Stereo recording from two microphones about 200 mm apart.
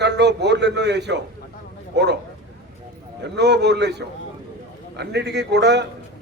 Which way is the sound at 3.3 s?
60° right (ahead or behind).